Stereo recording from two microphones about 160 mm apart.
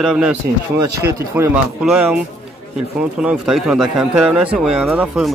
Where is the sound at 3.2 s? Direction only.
5° right (ahead or behind).